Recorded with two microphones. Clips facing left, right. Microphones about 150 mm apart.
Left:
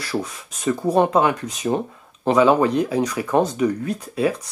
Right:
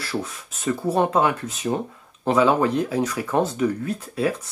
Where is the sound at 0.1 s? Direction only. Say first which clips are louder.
Left 3 dB; 20° left (ahead or behind).